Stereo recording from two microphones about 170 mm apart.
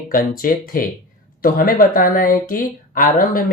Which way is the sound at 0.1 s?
55° left (ahead or behind).